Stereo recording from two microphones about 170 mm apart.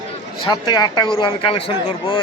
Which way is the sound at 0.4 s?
25° left (ahead or behind).